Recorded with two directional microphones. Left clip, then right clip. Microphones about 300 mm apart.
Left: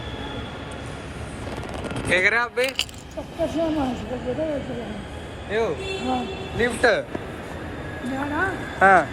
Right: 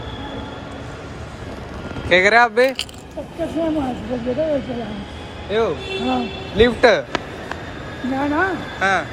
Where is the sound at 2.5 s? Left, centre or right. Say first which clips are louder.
Right 7 dB; right.